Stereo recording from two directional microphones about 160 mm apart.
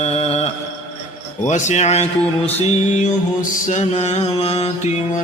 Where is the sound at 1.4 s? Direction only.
50° left (ahead or behind).